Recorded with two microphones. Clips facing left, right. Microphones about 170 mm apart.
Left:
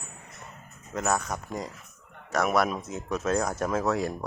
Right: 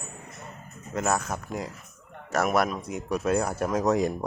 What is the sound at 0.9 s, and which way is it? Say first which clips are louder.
Speech: right 1 dB; centre (ahead or behind).